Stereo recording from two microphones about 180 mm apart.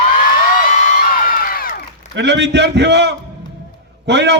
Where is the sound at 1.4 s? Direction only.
55° left (ahead or behind).